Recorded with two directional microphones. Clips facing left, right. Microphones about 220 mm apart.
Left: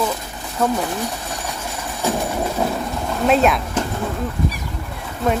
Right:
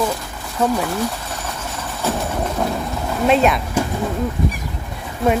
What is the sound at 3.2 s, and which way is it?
Speech, centre (ahead or behind).